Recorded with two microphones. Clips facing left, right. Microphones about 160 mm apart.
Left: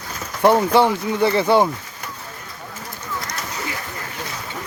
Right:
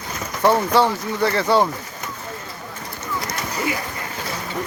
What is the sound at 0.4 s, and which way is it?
Speech, 15° left (ahead or behind).